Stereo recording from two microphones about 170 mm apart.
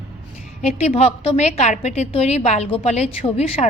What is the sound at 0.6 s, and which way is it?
A woman's voice, 40° left (ahead or behind).